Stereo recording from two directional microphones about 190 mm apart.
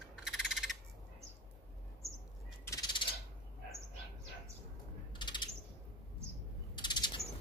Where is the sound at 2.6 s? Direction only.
20° left (ahead or behind).